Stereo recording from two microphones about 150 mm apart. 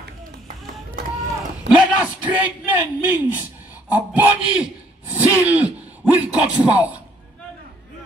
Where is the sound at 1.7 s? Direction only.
10° right (ahead or behind).